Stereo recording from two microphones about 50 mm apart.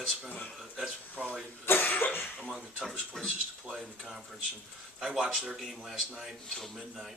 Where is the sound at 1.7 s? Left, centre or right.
Left.